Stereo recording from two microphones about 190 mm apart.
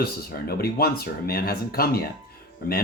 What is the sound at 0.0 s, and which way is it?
Speech, 55° left (ahead or behind).